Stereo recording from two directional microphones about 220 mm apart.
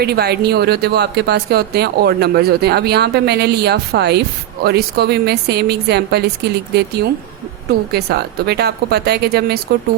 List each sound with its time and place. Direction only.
0.0 s speech: 45° right (ahead or behind)